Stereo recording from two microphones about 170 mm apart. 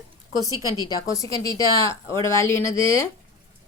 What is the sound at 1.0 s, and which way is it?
A woman's voice, 20° left (ahead or behind).